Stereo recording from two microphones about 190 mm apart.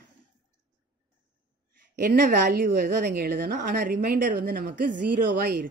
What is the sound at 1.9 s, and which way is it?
Speech, 55° right (ahead or behind).